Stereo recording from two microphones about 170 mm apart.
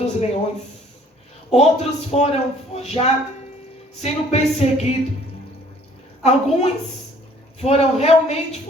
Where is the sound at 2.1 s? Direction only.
40° left (ahead or behind).